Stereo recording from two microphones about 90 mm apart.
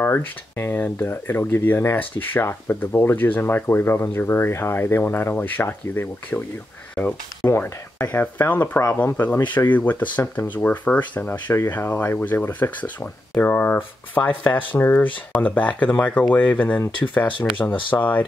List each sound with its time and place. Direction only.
0.0 s speech: 25° left (ahead or behind)